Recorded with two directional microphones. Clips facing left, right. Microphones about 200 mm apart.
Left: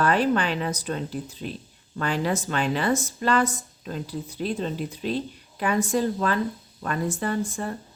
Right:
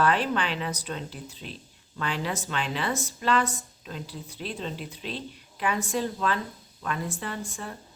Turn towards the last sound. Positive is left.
turn(degrees=45)  # may be behind; listen again after turning